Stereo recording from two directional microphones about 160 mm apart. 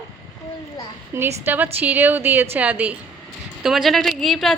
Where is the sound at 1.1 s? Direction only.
15° right (ahead or behind); by 4.5 s centre (ahead or behind).